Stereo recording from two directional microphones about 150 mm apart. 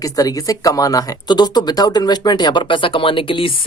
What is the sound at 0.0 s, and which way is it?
Speech, 25° left (ahead or behind).